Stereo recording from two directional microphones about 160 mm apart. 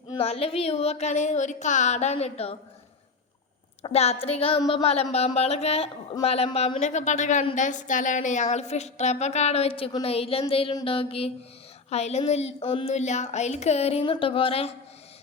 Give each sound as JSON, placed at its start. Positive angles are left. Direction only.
{"t": 0.1, "sound": "a woman's voice", "side_deg": 40}
{"t": 3.8, "sound": "a woman's voice", "side_deg": 40}